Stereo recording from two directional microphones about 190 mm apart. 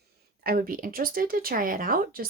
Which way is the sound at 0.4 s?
50° right (ahead or behind).